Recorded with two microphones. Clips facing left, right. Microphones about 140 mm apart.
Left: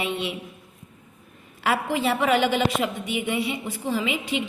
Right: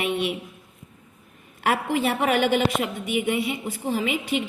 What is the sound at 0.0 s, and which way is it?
Speech, 55° right (ahead or behind).